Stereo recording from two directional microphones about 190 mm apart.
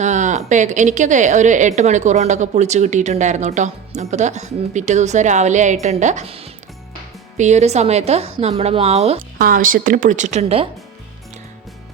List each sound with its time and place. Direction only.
0.0 s a woman's voice: 40° right (ahead or behind)
9.4 s a woman's voice: 45° right (ahead or behind)